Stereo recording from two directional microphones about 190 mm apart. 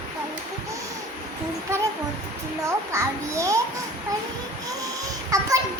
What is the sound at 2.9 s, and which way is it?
Child singing, 15° right (ahead or behind).